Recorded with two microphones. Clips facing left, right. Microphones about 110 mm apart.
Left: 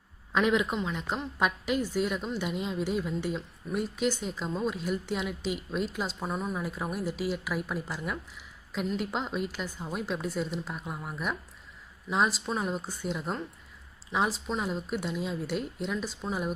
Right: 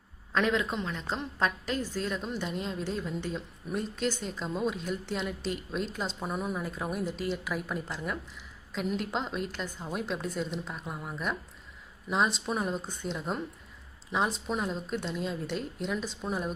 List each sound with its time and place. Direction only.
0.3 s a woman's voice: 10° left (ahead or behind)